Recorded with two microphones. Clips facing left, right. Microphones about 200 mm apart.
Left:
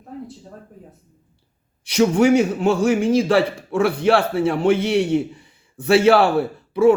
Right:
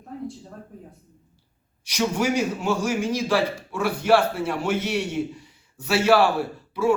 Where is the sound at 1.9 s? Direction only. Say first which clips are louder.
Left 9 dB; 60° left (ahead or behind).